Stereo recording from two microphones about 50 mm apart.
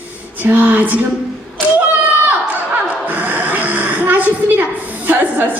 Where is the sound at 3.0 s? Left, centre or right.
Right.